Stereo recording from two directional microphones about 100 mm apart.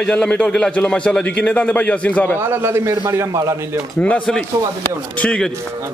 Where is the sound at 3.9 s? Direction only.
10° left (ahead or behind).